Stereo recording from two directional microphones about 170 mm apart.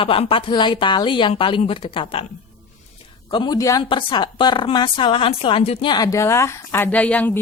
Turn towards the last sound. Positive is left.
turn(degrees=10)  # may be behind; listen again after turning